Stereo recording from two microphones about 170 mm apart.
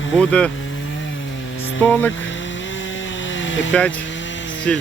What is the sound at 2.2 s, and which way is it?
Vehicle, 90° left.